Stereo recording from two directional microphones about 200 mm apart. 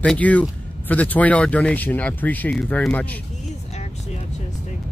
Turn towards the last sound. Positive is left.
turn(degrees=35)  # may be behind; listen again after turning